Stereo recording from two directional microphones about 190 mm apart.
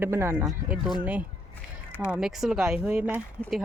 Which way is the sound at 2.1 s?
Centre (ahead or behind).